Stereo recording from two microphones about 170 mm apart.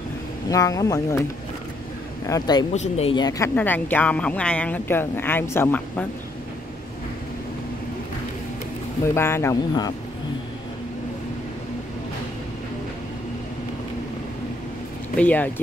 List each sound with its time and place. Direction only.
0.5 s speech: 20° left (ahead or behind)
2.2 s speech: 20° left (ahead or behind)
2.7 s speech: 40° left (ahead or behind); by 6.0 s 10° left (ahead or behind)
9.0 s speech: 15° left (ahead or behind)
15.1 s speech: 10° left (ahead or behind)